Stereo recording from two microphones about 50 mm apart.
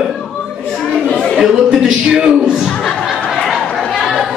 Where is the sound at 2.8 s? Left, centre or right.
Centre.